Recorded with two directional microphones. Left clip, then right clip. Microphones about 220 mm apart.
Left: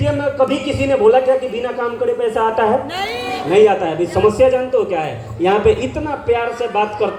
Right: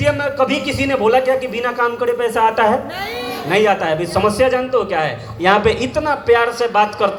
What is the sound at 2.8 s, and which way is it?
Speech, 45° left (ahead or behind).